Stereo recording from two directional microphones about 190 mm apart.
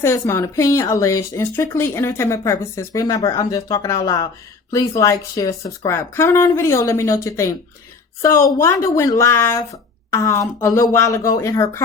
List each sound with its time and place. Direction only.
0.0 s speech: 15° left (ahead or behind)
8.5 s speech: 15° left (ahead or behind)